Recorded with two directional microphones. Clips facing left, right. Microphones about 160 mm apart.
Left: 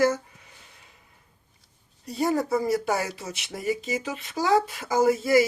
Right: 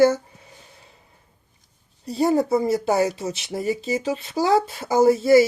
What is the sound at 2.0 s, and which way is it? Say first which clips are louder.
Speech: right 5 dB; 30° right (ahead or behind).